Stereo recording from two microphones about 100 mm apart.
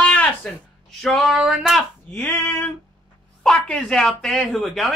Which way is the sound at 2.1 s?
20° left (ahead or behind).